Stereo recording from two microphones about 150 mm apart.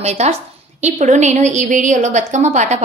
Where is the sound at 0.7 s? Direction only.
50° right (ahead or behind).